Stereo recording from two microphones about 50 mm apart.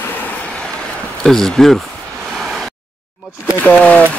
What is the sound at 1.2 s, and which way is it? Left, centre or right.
Speech, centre.